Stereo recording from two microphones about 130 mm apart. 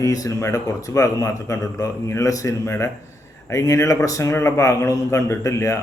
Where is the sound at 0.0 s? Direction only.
25° left (ahead or behind).